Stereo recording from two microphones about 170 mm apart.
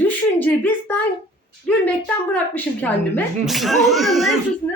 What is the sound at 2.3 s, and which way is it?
Speech, 10° left (ahead or behind).